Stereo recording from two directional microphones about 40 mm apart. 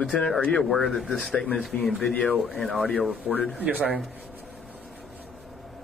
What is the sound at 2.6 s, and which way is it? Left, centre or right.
Speech, left.